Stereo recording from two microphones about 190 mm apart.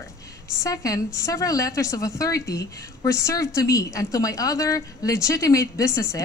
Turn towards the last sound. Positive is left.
turn(degrees=15)  # may be behind; listen again after turning